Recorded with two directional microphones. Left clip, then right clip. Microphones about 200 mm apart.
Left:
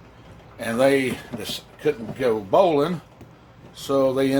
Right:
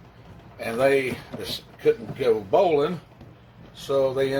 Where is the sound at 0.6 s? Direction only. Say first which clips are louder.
Left 2 dB; 25° left (ahead or behind).